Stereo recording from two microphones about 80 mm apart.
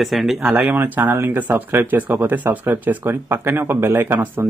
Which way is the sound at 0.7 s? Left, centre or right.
Right.